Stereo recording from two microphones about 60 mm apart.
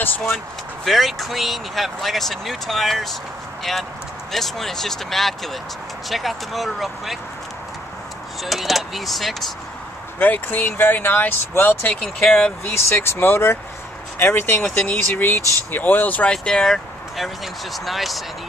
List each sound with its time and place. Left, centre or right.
0.8 s speech: centre
4.3 s speech: centre
8.5 s speech: centre
10.1 s speech: left
12.0 s speech: centre
12.7 s speech: left
16.3 s speech: centre